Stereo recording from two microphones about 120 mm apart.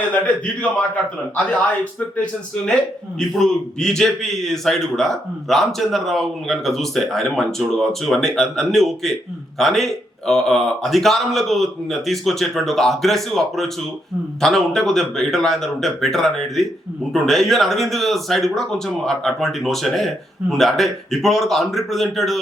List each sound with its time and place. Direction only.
1.4 s a man's voice: 10° left (ahead or behind)